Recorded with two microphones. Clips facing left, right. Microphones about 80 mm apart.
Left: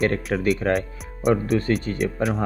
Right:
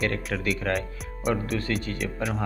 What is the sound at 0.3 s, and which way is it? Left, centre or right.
Speech, left.